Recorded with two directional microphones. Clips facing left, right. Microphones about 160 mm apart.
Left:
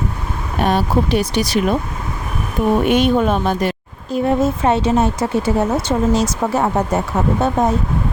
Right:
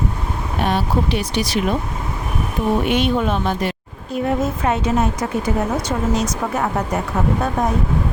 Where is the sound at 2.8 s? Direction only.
45° left (ahead or behind).